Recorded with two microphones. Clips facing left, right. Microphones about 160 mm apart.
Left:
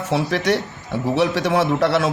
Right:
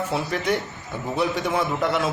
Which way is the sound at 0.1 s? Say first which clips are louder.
Left 8 dB; 80° left.